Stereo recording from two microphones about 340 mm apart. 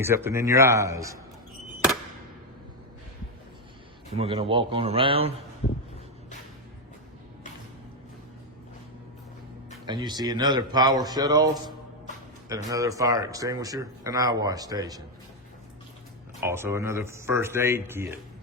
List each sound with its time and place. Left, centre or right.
0.0 s speech: centre
4.1 s speech: centre
9.8 s speech: centre
12.5 s speech: centre
16.4 s speech: centre